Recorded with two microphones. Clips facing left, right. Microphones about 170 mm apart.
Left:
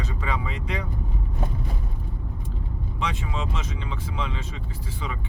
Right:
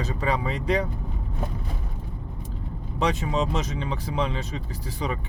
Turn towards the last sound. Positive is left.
turn(degrees=-40)  # may be behind; listen again after turning